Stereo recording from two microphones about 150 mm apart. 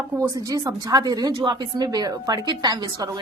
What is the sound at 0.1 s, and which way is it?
A woman's voice, 20° right (ahead or behind).